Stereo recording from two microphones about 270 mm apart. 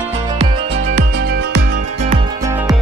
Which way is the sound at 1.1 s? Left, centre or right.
Right.